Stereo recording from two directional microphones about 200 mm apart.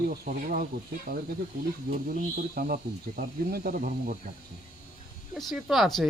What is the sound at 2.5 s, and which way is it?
Speech, 50° right (ahead or behind).